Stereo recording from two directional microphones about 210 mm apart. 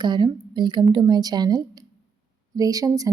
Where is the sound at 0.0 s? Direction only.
20° right (ahead or behind).